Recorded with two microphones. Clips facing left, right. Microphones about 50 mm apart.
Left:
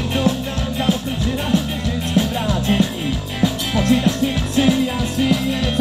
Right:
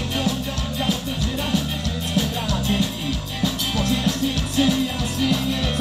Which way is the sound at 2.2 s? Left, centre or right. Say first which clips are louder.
Left 4 dB; left.